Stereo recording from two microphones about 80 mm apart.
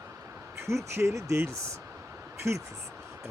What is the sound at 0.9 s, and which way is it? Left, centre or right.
Speech, right.